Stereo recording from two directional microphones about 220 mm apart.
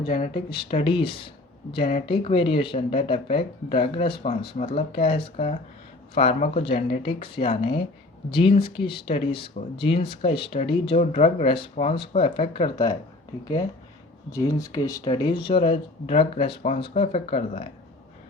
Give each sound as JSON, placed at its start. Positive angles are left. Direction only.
{"t": 0.0, "sound": "speech", "side_deg": 25}
{"t": 14.3, "sound": "speech", "side_deg": 15}